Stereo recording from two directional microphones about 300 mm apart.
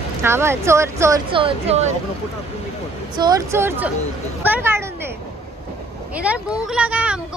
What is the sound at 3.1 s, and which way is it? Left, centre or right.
Speech, centre.